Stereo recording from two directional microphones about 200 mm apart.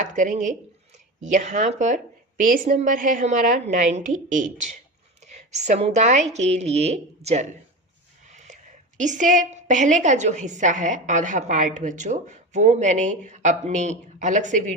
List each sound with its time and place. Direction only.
0.0 s a woman's voice: 40° right (ahead or behind)
8.3 s a sound: 35° right (ahead or behind)
9.0 s a woman's voice: 40° right (ahead or behind)